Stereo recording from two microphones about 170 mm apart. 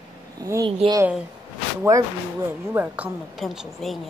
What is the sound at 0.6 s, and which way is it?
Speech, 30° right (ahead or behind).